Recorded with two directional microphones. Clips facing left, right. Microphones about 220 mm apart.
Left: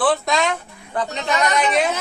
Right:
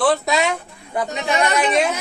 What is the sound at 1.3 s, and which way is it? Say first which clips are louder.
Speech: right 1 dB; 30° right (ahead or behind).